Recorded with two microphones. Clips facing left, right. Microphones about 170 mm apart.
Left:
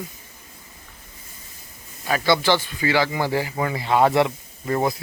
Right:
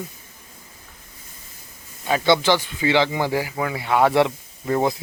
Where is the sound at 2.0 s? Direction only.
20° right (ahead or behind).